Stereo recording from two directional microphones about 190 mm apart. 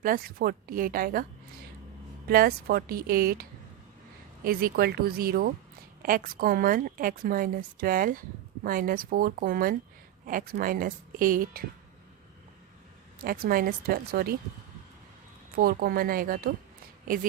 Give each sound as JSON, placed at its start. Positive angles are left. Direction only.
{"t": 0.0, "sound": "a woman's voice", "side_deg": -50}
{"t": 2.2, "sound": "a woman's voice", "side_deg": -55}
{"t": 4.4, "sound": "a woman's voice", "side_deg": -50}
{"t": 13.2, "sound": "a woman's voice", "side_deg": -50}
{"t": 15.5, "sound": "a woman's voice", "side_deg": -55}